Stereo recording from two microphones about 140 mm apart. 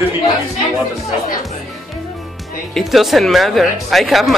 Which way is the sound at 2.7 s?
Centre (ahead or behind).